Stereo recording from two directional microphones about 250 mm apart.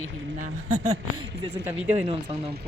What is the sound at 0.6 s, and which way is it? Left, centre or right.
Speech, right.